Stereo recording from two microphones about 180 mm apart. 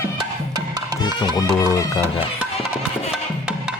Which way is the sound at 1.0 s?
20° left (ahead or behind).